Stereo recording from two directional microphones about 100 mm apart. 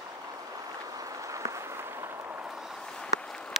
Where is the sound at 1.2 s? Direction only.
35° right (ahead or behind).